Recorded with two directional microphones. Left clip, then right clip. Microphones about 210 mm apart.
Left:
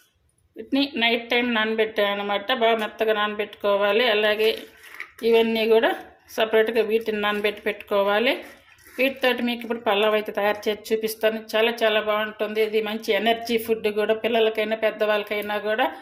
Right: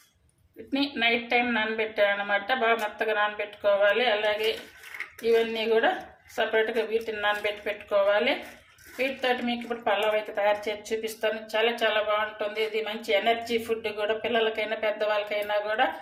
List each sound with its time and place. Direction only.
0.7 s speech: 40° left (ahead or behind)